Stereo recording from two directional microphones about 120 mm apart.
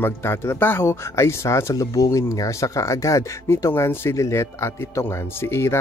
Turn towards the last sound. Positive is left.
turn(degrees=20)  # may be behind; listen again after turning